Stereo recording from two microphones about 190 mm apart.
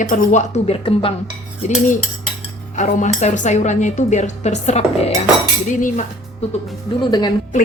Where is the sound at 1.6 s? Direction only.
40° left (ahead or behind).